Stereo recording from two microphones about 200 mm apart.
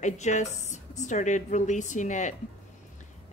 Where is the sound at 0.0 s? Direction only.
35° left (ahead or behind).